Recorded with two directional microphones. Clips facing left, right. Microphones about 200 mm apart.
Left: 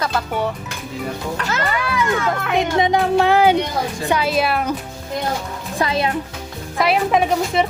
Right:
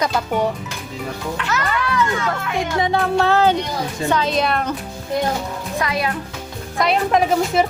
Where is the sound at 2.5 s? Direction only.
20° left (ahead or behind).